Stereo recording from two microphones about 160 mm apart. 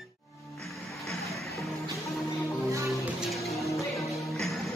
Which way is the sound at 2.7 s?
20° right (ahead or behind).